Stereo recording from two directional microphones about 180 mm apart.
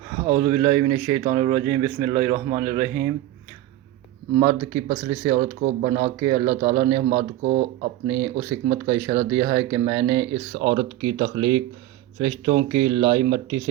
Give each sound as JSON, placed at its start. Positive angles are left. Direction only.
{"t": 0.2, "sound": "speech", "side_deg": -40}
{"t": 0.9, "sound": "speech", "side_deg": -15}
{"t": 2.0, "sound": "speech", "side_deg": -40}
{"t": 2.6, "sound": "speech", "side_deg": -10}
{"t": 4.4, "sound": "speech", "side_deg": -20}
{"t": 10.5, "sound": "speech", "side_deg": -40}